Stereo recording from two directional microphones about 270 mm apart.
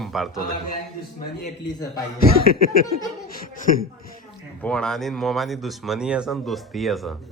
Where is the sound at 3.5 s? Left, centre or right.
Left.